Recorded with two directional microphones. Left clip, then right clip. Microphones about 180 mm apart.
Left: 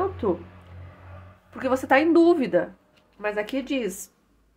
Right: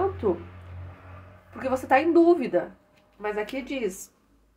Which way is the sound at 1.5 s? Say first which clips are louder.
Left 2 dB; 40° left (ahead or behind).